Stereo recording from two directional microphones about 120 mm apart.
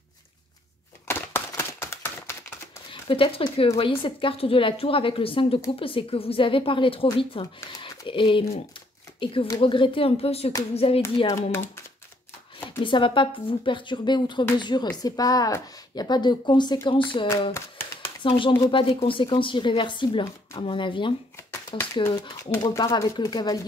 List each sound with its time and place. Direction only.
1.0 s a sound: 20° left (ahead or behind)
2.9 s speech: 50° left (ahead or behind)
11.2 s speech: 25° left (ahead or behind)
12.8 s speech: 45° left (ahead or behind)
22.6 s speech: 30° left (ahead or behind)